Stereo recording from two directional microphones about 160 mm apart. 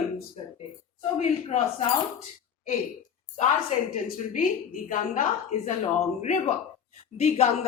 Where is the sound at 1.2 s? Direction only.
40° left (ahead or behind).